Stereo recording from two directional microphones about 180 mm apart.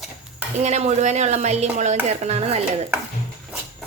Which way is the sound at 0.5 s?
40° right (ahead or behind).